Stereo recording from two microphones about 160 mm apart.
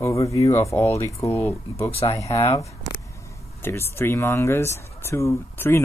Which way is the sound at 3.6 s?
15° left (ahead or behind).